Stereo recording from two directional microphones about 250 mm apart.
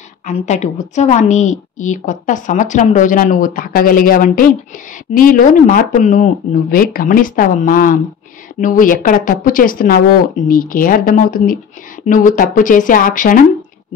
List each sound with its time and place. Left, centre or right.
0.3 s a woman's voice: left